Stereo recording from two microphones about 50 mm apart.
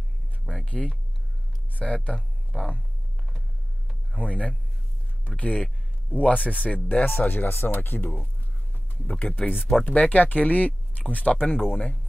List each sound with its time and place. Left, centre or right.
0.8 s speech: centre
1.7 s speech: left
2.1 s speech: centre
4.2 s speech: left
7.1 s speech: left
9.0 s speech: left